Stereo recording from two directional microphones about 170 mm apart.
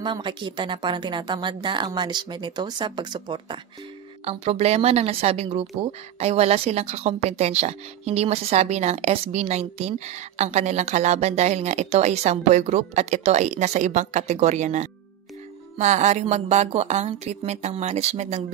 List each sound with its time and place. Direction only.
0.0 s a woman's voice: 25° right (ahead or behind)
4.2 s speech: 35° right (ahead or behind)